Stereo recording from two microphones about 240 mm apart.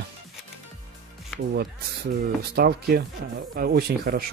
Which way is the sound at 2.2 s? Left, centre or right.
Right.